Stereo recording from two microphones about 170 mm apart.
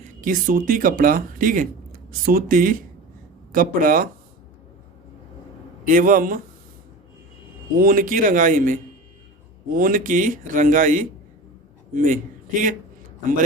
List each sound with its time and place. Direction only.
0.0 s speech: 50° right (ahead or behind)
5.8 s a man's voice: 55° right (ahead or behind)
7.8 s a man's voice: 55° right (ahead or behind)